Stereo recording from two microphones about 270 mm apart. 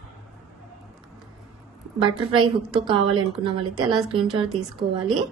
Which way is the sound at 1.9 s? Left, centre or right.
Centre.